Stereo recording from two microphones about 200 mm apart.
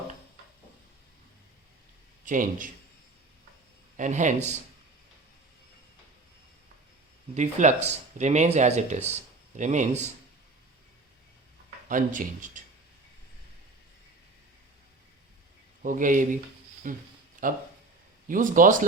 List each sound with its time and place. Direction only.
2.2 s a man's voice: 40° right (ahead or behind)
3.9 s speech: 40° right (ahead or behind)
7.3 s speech: 35° right (ahead or behind)
11.9 s speech: 40° right (ahead or behind)
15.8 s speech: 40° right (ahead or behind)
17.4 s a sound: 40° right (ahead or behind)
18.3 s speech: 45° right (ahead or behind)